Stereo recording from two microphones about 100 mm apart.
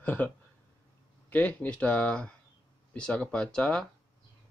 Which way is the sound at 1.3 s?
15° left (ahead or behind).